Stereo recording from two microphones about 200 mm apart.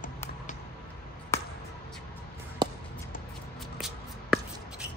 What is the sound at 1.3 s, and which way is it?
Basketball bounce, 15° left (ahead or behind).